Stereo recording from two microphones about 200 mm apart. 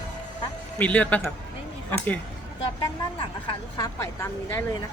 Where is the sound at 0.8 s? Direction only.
5° left (ahead or behind).